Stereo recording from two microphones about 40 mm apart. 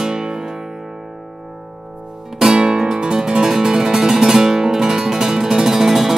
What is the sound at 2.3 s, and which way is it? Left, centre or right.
Music, centre.